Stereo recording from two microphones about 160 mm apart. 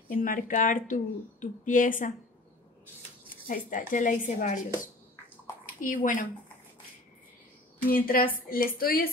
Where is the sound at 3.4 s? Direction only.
55° left (ahead or behind).